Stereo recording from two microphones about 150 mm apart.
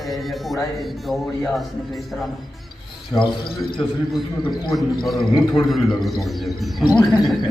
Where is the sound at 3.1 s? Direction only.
25° left (ahead or behind).